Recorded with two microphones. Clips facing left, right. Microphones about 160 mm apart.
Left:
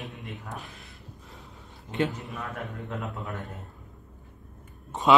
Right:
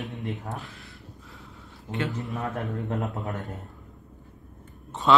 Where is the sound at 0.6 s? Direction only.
20° left (ahead or behind).